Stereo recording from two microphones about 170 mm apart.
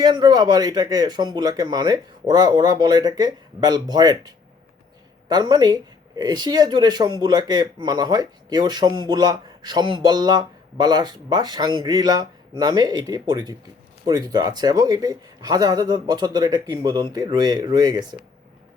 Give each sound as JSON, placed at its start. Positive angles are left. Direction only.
{"t": 0.0, "sound": "speech", "side_deg": -25}